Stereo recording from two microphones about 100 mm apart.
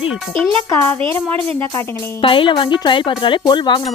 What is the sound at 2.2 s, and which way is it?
A woman's voice, 60° left (ahead or behind).